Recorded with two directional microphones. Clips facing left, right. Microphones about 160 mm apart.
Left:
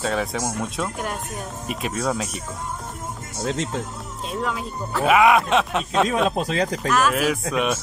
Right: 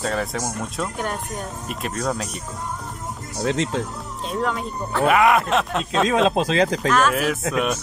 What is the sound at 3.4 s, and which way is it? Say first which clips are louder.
Speech: right 3 dB; 90° right.